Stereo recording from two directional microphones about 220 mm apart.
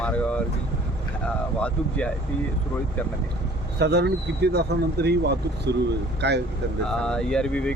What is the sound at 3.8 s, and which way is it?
Speech, 50° right (ahead or behind).